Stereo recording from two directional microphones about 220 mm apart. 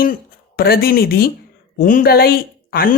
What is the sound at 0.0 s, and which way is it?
Speech, 40° left (ahead or behind).